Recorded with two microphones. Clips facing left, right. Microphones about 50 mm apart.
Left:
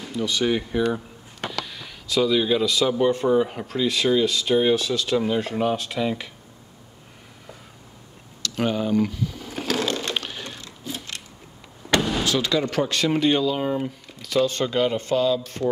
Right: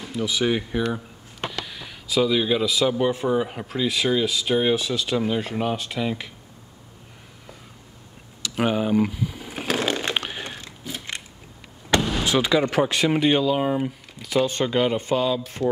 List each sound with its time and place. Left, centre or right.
0.0 s speech: centre
8.4 s a sound: centre
12.0 s vehicle: centre
12.3 s speech: centre